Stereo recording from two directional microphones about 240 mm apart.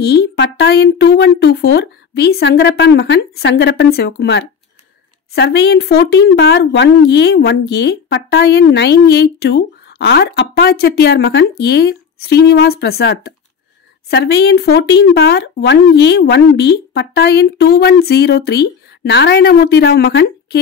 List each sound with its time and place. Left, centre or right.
0.0 s speech: left